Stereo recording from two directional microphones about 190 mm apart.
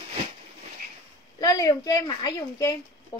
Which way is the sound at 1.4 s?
20° left (ahead or behind).